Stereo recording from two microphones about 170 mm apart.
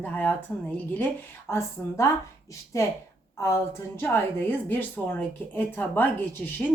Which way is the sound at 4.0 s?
15° left (ahead or behind).